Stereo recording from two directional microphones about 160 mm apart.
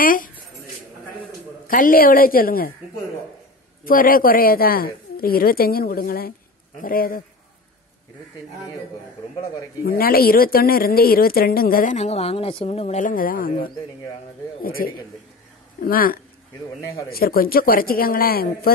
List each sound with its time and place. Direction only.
0.0 s a woman's voice: 60° left (ahead or behind)
1.7 s a woman's voice: 60° left (ahead or behind)
3.8 s a woman's voice: 60° left (ahead or behind)
9.8 s a woman's voice: 70° left (ahead or behind)